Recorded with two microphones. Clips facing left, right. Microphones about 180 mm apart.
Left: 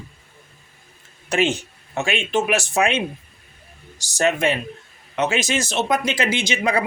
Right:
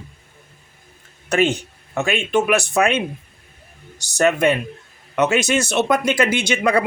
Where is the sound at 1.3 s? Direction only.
60° right (ahead or behind).